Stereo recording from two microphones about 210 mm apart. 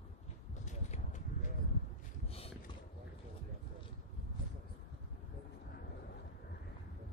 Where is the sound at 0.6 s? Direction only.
35° left (ahead or behind).